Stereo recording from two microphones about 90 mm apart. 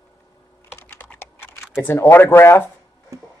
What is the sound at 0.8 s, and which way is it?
Typing, 25° left (ahead or behind).